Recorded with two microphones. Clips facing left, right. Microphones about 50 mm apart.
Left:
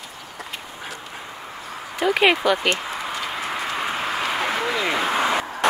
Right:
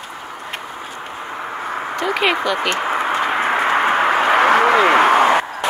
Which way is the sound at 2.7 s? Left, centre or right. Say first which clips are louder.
Right 9 dB; right.